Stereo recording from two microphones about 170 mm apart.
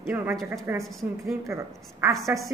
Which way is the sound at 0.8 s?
Centre (ahead or behind).